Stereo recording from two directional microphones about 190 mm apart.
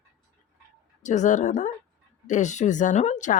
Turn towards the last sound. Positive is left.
turn(degrees=40)  # may be behind; listen again after turning